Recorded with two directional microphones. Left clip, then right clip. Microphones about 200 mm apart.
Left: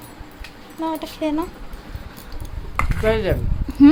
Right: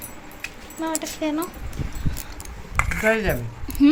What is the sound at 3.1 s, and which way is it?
Speech, 20° left (ahead or behind).